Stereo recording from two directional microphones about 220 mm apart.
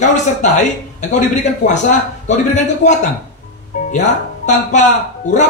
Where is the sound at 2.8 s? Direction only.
35° left (ahead or behind).